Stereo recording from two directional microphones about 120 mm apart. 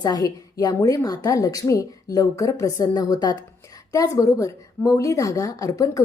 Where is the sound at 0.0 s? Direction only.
30° left (ahead or behind).